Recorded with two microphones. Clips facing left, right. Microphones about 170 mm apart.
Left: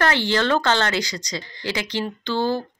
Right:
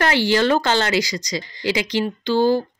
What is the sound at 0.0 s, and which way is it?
Speech, 10° right (ahead or behind).